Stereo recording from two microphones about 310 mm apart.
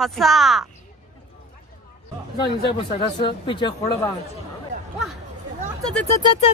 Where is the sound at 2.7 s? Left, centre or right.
Centre.